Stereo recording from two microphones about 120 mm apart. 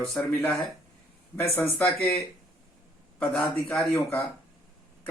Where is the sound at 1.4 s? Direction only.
20° left (ahead or behind).